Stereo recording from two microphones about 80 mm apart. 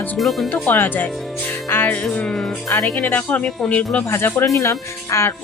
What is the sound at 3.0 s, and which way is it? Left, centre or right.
Speech, centre.